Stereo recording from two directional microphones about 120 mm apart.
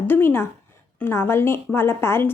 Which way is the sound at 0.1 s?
20° left (ahead or behind).